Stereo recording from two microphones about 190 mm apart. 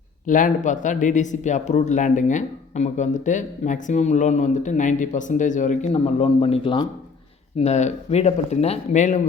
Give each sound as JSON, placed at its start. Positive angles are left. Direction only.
{"t": 0.3, "sound": "speech", "side_deg": 45}